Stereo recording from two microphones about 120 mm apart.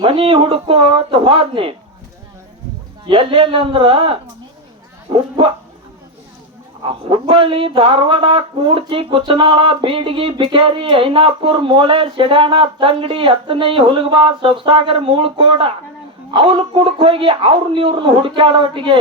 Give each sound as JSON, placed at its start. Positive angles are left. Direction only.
{"t": 0.0, "sound": "speech", "side_deg": -50}
{"t": 3.1, "sound": "speech", "side_deg": -50}
{"t": 6.8, "sound": "speech", "side_deg": -50}